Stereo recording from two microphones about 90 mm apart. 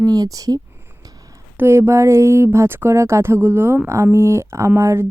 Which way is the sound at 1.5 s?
25° right (ahead or behind).